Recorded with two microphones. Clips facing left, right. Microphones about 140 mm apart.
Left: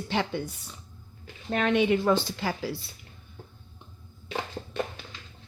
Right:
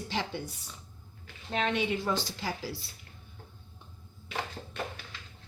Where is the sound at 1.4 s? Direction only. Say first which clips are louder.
Left 6 dB; 55° left (ahead or behind).